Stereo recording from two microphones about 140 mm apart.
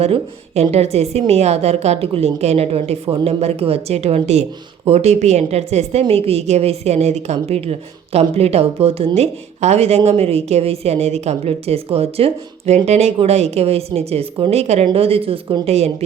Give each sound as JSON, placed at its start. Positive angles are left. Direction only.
{"t": 0.0, "sound": "speech", "side_deg": -50}